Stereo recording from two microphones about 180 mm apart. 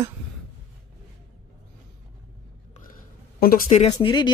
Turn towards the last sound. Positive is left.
turn(degrees=25)  # may be behind; listen again after turning